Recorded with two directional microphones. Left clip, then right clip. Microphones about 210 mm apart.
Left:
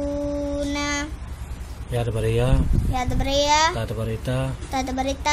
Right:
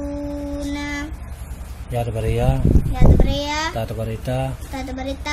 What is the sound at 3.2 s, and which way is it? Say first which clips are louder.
Speech: left 5 dB; 50° left (ahead or behind).